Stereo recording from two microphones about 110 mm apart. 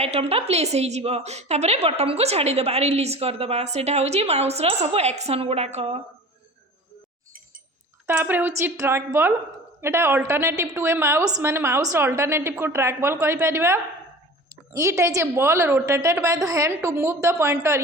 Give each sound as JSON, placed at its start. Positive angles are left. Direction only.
{"t": 0.0, "sound": "a woman's voice", "side_deg": -65}
{"t": 8.0, "sound": "a woman's voice", "side_deg": -20}
{"t": 11.3, "sound": "a woman's voice", "side_deg": -35}
{"t": 11.5, "sound": "a woman's voice", "side_deg": -25}